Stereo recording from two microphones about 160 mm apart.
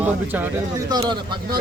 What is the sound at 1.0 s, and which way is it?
Speech, 30° right (ahead or behind).